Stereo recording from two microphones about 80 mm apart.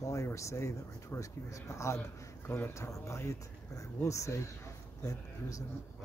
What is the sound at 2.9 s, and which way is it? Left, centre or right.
Speech, left.